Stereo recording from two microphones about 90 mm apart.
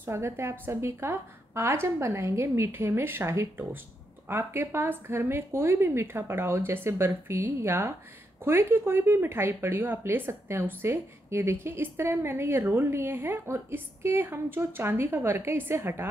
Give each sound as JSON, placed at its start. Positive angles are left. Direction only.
{"t": 0.0, "sound": "a woman's voice", "side_deg": -30}